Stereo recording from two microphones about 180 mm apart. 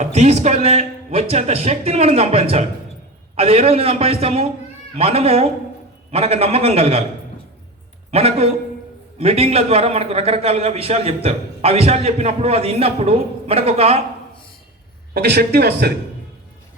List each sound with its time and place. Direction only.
0.0 s a man's voice: 40° right (ahead or behind)
8.1 s a man's voice: 35° right (ahead or behind)
15.1 s speech: 65° right (ahead or behind)